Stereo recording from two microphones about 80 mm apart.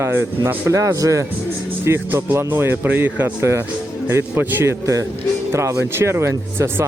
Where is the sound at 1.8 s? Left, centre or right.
Right.